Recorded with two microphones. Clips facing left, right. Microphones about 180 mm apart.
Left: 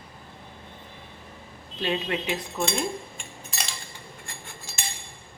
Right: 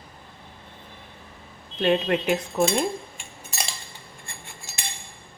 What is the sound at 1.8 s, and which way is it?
Chink, 55° right (ahead or behind).